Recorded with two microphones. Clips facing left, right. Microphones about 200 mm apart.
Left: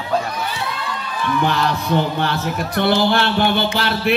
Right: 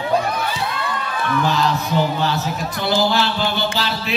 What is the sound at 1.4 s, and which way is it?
Speech, 60° left (ahead or behind).